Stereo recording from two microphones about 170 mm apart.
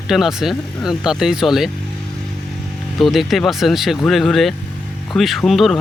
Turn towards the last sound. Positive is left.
turn(degrees=0)  # may be behind; listen again after turning